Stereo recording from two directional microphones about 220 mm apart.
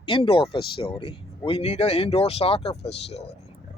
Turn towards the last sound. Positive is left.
turn(degrees=30)  # may be behind; listen again after turning